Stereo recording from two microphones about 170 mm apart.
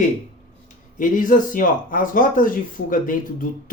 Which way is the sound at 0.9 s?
50° left (ahead or behind).